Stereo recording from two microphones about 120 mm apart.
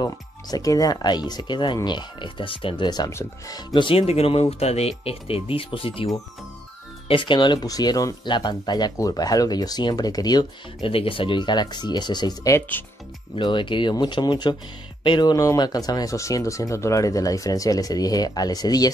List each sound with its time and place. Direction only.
0.0 s speech: 30° left (ahead or behind)
3.1 s speech: 25° left (ahead or behind); by 6.0 s 50° left (ahead or behind)
7.1 s speech: 45° left (ahead or behind)
10.8 s speech: 50° left (ahead or behind)
12.5 s speech: 15° left (ahead or behind)
13.4 s speech: 40° left (ahead or behind)